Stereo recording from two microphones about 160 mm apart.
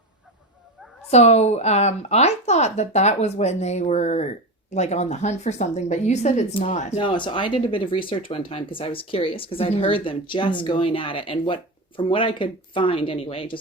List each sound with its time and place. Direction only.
1.1 s speech: 45° left (ahead or behind)
7.0 s speech: 30° left (ahead or behind)